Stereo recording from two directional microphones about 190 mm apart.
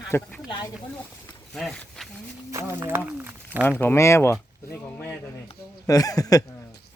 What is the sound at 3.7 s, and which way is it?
Speech, 10° left (ahead or behind).